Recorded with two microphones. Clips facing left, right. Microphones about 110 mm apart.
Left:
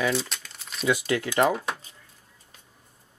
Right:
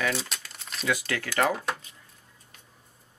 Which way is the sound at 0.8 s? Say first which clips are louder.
Left 5 dB; 20° left (ahead or behind).